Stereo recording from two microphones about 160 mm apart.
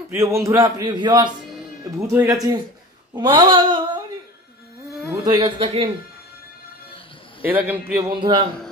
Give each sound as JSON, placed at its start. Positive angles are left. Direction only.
{"t": 0.1, "sound": "a man's voice", "side_deg": -20}
{"t": 2.0, "sound": "a man's voice", "side_deg": -20}
{"t": 5.2, "sound": "speech", "side_deg": -20}
{"t": 5.6, "sound": "a man's voice", "side_deg": -35}
{"t": 7.4, "sound": "a man's voice", "side_deg": -10}
{"t": 8.2, "sound": "a man's voice", "side_deg": -30}